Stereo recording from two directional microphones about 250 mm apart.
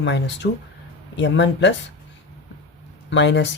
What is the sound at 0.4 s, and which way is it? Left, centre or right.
Speech, left.